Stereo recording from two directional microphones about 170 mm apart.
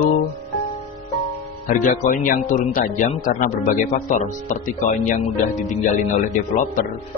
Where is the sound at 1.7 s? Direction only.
50° left (ahead or behind).